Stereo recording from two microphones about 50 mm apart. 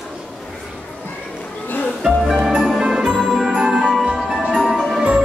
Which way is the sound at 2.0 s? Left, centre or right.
Centre.